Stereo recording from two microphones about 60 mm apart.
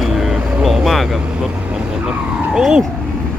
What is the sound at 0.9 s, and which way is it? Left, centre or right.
Speech, centre.